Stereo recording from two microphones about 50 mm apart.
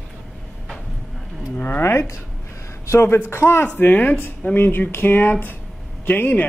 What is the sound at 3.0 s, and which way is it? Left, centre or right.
Speech, left.